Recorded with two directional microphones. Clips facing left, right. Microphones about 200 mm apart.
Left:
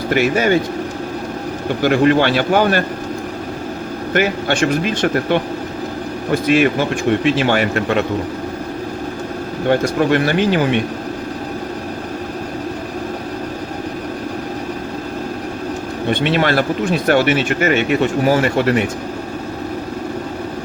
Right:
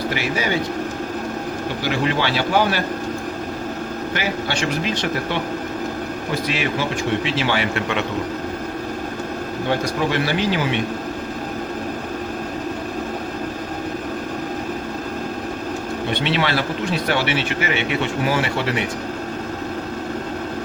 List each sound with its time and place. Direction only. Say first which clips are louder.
0.1 s speech: left 12 dB; 55° left (ahead or behind)
1.8 s speech: left 9 dB; 50° left (ahead or behind)
4.1 s speech: left 9 dB; 50° left (ahead or behind)
6.5 s speech: left 11 dB; 50° left (ahead or behind)
9.6 s speech: left 7 dB; 55° left (ahead or behind)
16.0 s speech: left 6 dB; 50° left (ahead or behind)